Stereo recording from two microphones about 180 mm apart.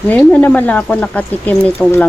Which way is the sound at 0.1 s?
5° left (ahead or behind).